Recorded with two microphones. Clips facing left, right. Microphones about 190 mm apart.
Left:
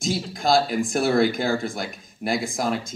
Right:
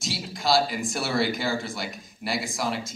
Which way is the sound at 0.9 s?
50° left (ahead or behind).